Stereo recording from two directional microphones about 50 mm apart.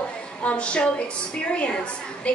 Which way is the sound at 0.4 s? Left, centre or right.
Left.